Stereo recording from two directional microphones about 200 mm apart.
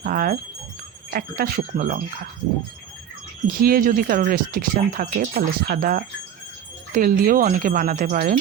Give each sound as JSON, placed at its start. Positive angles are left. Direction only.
{"t": 0.0, "sound": "speech", "side_deg": -45}
{"t": 3.4, "sound": "speech", "side_deg": -45}